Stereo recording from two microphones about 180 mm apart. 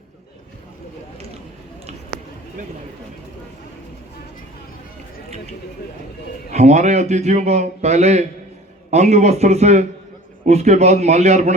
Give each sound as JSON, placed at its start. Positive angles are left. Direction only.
{"t": 6.5, "sound": "a man's voice", "side_deg": -40}